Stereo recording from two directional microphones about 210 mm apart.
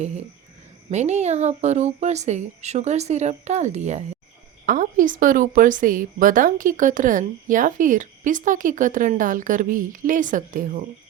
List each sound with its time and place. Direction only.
0.9 s a woman's voice: 30° right (ahead or behind)